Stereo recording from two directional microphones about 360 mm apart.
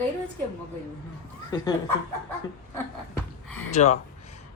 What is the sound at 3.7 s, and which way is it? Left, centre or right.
Speech, centre.